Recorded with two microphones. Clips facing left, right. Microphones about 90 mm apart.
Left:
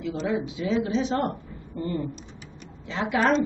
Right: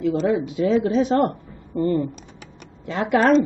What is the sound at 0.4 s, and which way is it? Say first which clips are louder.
Speech: right 7 dB; 45° right (ahead or behind).